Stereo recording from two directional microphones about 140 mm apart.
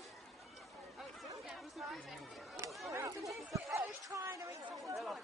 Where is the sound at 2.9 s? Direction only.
25° right (ahead or behind).